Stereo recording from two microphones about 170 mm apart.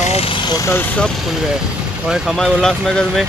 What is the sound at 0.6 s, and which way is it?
Speech, 10° left (ahead or behind).